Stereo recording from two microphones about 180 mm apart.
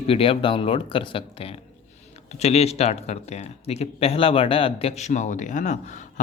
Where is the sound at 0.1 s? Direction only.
30° left (ahead or behind).